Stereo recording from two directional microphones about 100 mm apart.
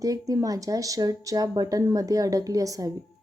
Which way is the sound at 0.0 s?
35° right (ahead or behind).